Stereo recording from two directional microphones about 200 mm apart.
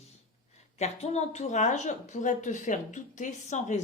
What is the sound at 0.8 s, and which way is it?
A woman's voice, 35° left (ahead or behind).